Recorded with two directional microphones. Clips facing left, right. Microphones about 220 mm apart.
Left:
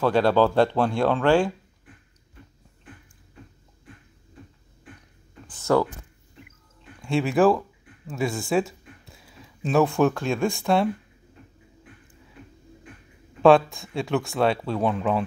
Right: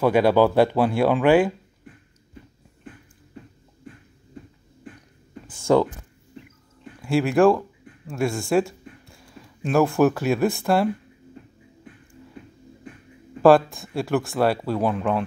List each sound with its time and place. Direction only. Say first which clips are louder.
0.0 s speech: right 2 dB; 10° right (ahead or behind)
5.7 s speech: right 3 dB; 20° right (ahead or behind)
7.0 s speech: right 2 dB; centre (ahead or behind)
13.4 s speech: right 1 dB; centre (ahead or behind)